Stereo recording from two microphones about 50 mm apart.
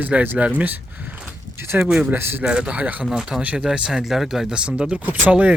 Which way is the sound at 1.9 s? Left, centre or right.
Centre.